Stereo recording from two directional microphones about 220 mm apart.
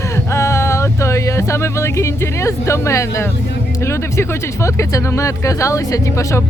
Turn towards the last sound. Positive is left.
turn(degrees=15)  # may be behind; listen again after turning